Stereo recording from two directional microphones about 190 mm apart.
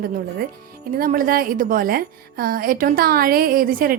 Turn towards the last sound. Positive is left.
turn(degrees=-50)  # may be behind; listen again after turning